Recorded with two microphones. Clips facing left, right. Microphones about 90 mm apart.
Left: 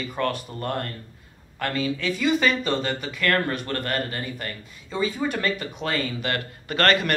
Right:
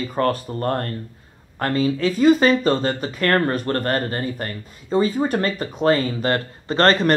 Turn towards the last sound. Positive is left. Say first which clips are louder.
# right 5 dB
turn(degrees=-30)  # may be behind; listen again after turning